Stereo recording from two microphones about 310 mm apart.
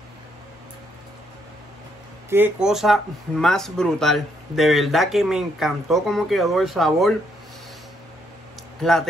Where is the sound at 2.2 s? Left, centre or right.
Centre.